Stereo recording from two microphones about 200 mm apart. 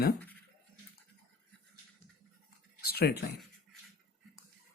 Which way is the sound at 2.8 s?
50° left (ahead or behind).